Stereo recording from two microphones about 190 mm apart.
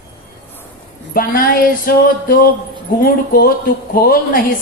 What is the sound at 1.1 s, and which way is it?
A woman's voice, 50° left (ahead or behind).